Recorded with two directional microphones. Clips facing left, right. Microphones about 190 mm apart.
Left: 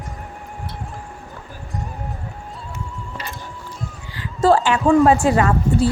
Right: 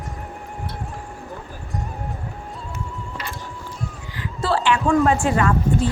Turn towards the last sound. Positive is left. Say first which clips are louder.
# left 2 dB
turn(degrees=35)  # may be behind; listen again after turning